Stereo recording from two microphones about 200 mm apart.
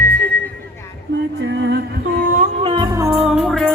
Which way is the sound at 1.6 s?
55° right (ahead or behind).